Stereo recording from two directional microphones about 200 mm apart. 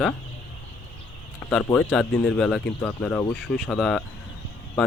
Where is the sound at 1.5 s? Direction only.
5° left (ahead or behind).